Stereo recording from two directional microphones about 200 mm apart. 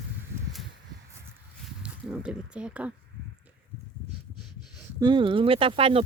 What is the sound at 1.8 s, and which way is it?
Speech, 5° right (ahead or behind).